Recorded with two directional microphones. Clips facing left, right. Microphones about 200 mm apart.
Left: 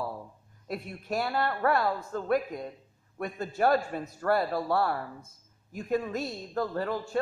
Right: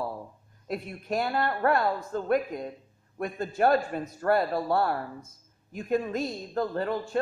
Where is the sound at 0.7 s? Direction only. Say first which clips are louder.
Right 2 dB; centre (ahead or behind).